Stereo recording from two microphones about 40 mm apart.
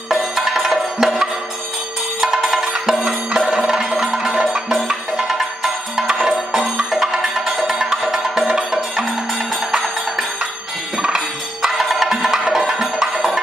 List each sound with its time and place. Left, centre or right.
0.1 s music: centre
2.3 s music: centre
11.6 s music: centre